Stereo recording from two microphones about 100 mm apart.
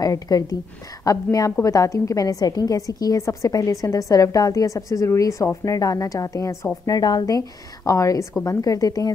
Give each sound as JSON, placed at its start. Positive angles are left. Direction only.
{"t": 0.0, "sound": "a woman's voice", "side_deg": 40}